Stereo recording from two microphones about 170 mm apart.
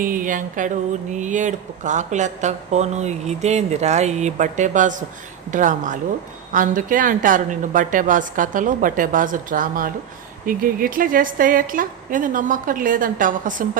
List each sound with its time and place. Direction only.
0.0 s speech: 55° right (ahead or behind)